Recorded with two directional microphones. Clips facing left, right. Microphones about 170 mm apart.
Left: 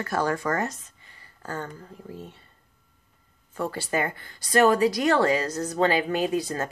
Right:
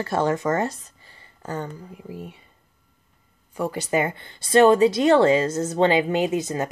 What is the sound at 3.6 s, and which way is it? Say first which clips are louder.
Speech: right 4 dB; 15° right (ahead or behind).